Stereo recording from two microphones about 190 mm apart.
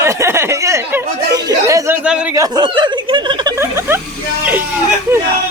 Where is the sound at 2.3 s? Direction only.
20° right (ahead or behind).